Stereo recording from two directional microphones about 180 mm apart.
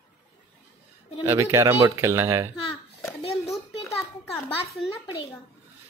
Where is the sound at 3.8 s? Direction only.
15° left (ahead or behind).